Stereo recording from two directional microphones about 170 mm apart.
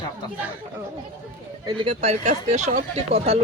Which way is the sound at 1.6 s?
30° right (ahead or behind).